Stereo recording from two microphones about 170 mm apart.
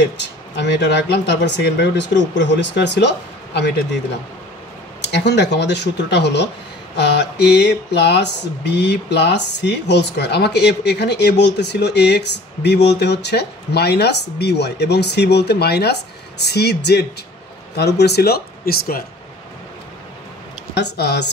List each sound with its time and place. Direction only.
0.2 s speech: 85° left
5.0 s speech: 80° left; by 19.0 s 60° left (ahead or behind)
20.7 s speech: 75° left (ahead or behind)